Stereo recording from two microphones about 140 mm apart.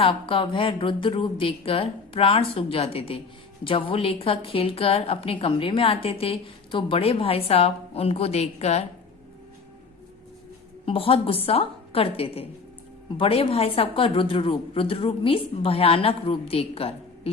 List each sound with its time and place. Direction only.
0.0 s a woman's voice: 40° left (ahead or behind)
10.8 s a woman's voice: 40° left (ahead or behind)